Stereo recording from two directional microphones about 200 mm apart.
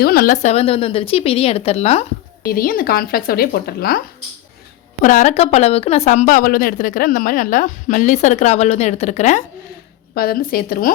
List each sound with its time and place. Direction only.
0.0 s speech: 50° left (ahead or behind)
0.4 s speech: 30° left (ahead or behind)
2.4 s speech: 45° left (ahead or behind)
5.0 s speech: 40° left (ahead or behind)
10.2 s speech: 50° left (ahead or behind)